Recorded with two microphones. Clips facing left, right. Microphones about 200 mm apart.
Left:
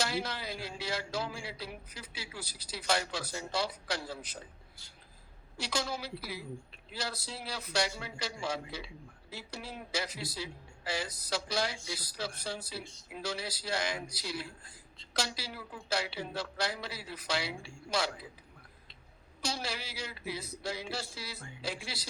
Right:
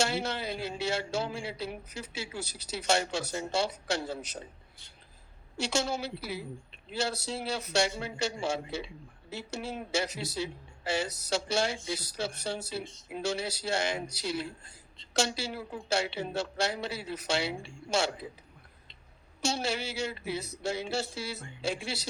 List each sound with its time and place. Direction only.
0.0 s speech: 25° right (ahead or behind)
5.5 s speech: 25° right (ahead or behind)
19.4 s speech: 25° right (ahead or behind)